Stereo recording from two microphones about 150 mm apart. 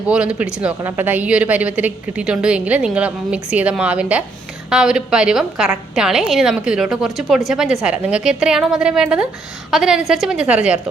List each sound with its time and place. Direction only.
0.1 s a woman's voice: 10° right (ahead or behind)